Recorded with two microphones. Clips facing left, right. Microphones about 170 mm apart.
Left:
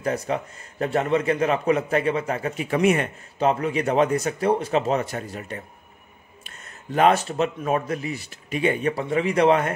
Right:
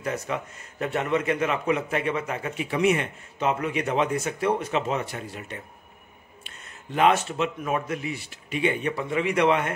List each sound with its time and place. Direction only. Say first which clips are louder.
0.0 s speech: left 4 dB; 35° left (ahead or behind)
3.3 s speech: left 4 dB; 35° left (ahead or behind)